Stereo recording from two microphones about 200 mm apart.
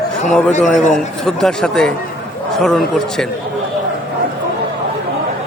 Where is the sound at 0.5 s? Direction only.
40° left (ahead or behind).